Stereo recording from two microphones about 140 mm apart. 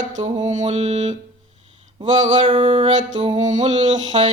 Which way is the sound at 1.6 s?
45° right (ahead or behind).